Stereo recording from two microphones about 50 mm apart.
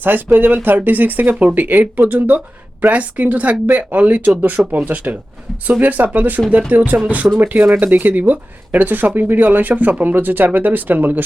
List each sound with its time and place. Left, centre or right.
0.0 s speech: right